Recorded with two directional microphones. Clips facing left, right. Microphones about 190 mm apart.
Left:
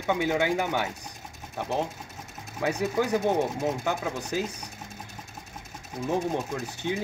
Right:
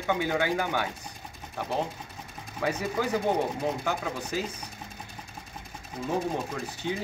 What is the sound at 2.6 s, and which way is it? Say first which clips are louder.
Speech: left 2 dB; 15° left (ahead or behind).